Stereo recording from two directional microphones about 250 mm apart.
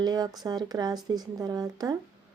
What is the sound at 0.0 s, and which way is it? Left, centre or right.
Speech, centre.